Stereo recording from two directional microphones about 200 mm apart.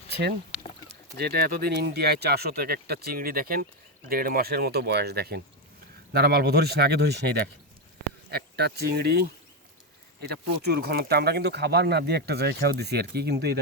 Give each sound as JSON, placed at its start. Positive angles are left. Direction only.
{"t": 0.1, "sound": "speech", "side_deg": -55}